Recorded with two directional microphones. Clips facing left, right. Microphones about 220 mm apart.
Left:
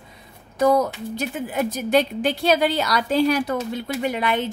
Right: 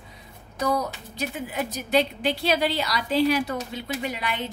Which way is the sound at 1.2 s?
50° left (ahead or behind).